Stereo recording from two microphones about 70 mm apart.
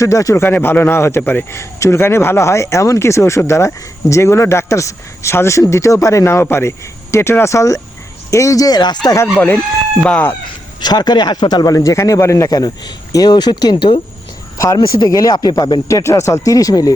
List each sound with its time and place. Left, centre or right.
0.0 s speech: left
0.4 s speech: left
9.2 s speech: left
10.0 s speech: centre
10.8 s speech: left
12.5 s speech: left
14.8 s speech: left
15.9 s speech: left